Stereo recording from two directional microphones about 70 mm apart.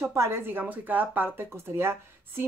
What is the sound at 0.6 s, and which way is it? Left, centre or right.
Speech, right.